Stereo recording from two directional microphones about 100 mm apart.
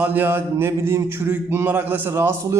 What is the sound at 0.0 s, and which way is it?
A man's voice, 20° right (ahead or behind).